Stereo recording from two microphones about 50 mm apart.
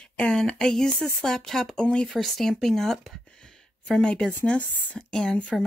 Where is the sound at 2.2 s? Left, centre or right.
Centre.